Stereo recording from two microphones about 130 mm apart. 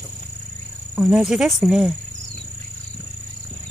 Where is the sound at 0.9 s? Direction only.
10° right (ahead or behind).